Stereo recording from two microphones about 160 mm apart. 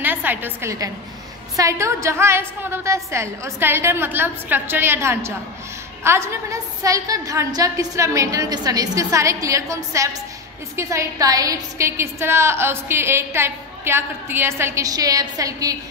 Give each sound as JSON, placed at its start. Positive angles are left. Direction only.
{"t": 0.0, "sound": "a woman's voice", "side_deg": -10}